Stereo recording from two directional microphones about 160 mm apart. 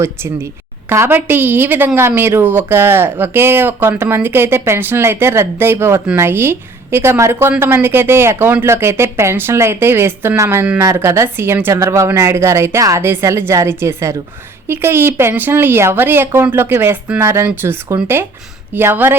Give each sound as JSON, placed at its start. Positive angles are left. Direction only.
{"t": 0.0, "sound": "a woman's voice", "side_deg": -15}